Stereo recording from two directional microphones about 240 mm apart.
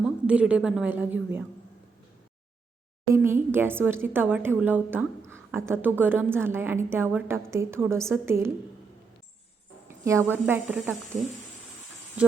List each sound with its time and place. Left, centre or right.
0.0 s a woman's voice: centre
3.2 s a woman's voice: centre
10.3 s a woman's voice: centre
11.1 s speech: right